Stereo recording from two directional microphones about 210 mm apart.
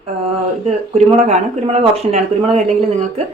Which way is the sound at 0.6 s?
30° right (ahead or behind).